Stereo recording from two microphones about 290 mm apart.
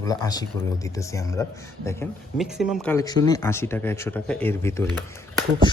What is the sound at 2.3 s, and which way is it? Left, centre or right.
Speech, centre.